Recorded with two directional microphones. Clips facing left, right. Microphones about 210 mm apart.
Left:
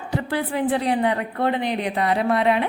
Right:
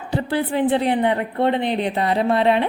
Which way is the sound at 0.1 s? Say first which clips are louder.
Right 3 dB; 30° right (ahead or behind).